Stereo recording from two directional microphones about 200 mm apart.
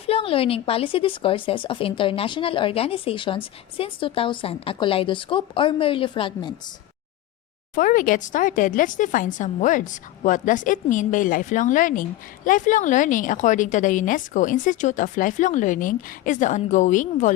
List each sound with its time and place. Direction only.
0.0 s speech: 30° left (ahead or behind)
7.8 s a woman's voice: 40° left (ahead or behind)